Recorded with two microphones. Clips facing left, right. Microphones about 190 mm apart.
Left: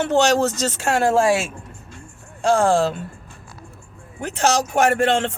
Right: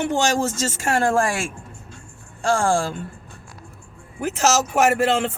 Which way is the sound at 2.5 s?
20° left (ahead or behind).